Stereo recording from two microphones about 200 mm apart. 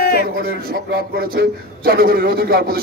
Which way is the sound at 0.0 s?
55° left (ahead or behind).